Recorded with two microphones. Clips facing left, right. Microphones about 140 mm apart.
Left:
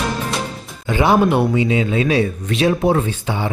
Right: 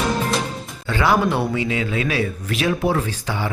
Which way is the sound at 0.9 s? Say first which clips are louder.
Left 4 dB; 15° left (ahead or behind).